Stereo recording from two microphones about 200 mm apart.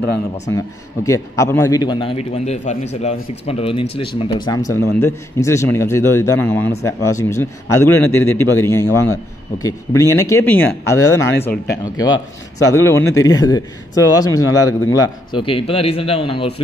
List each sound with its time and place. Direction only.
1.0 s a man's voice: 15° left (ahead or behind)